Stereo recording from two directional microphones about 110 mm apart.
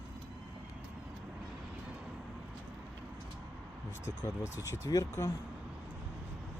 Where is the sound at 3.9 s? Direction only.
30° left (ahead or behind).